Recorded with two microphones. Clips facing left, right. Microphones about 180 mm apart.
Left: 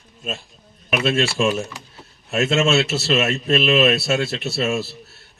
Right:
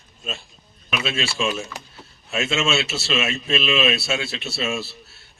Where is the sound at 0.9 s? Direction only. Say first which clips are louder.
Left 6 dB; 40° left (ahead or behind).